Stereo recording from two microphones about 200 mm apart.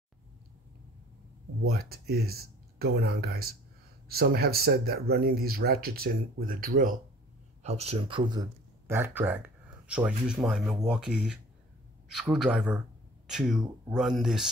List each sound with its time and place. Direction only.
1.7 s speech: 50° right (ahead or behind)
7.6 s speech: 30° right (ahead or behind); by 14.5 s centre (ahead or behind)